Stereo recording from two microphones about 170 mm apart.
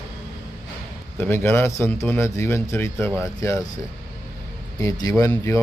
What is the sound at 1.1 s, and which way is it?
A man's voice, 15° left (ahead or behind).